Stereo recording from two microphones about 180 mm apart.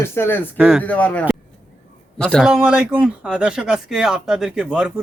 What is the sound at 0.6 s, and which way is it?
Speech, 5° right (ahead or behind).